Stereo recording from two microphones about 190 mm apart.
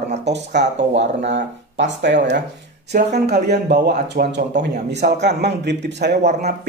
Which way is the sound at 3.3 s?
55° right (ahead or behind).